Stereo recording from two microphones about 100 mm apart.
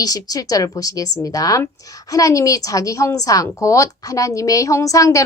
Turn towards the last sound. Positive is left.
turn(degrees=35)  # may be behind; listen again after turning